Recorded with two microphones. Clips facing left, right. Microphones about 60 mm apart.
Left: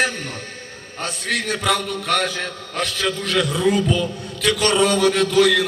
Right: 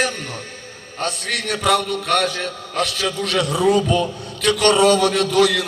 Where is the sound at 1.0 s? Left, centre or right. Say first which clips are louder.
Even; right.